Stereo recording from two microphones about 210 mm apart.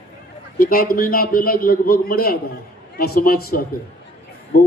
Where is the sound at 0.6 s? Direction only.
45° left (ahead or behind).